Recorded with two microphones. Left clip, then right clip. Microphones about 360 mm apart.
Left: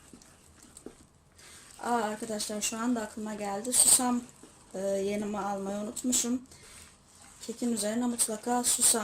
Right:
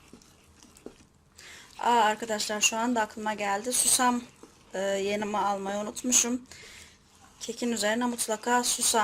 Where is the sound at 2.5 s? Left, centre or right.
Right.